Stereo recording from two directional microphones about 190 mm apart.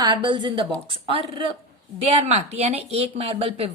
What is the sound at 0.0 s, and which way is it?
A woman's voice, 25° right (ahead or behind).